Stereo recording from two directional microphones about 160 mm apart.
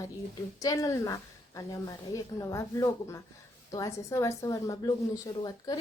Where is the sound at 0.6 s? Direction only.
20° left (ahead or behind).